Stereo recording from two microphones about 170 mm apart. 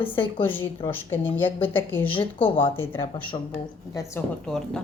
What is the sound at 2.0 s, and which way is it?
Speech, 30° left (ahead or behind).